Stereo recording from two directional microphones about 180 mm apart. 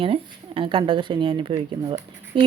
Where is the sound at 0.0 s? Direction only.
30° right (ahead or behind).